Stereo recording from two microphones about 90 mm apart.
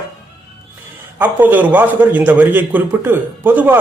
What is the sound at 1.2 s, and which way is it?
A man's voice, 20° right (ahead or behind).